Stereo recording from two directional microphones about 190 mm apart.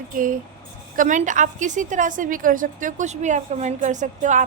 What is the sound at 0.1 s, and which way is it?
A woman's voice, 45° right (ahead or behind).